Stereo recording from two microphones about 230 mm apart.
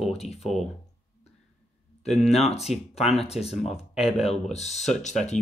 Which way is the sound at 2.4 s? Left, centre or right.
Left.